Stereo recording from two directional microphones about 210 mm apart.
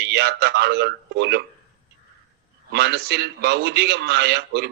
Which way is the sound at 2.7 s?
55° right (ahead or behind).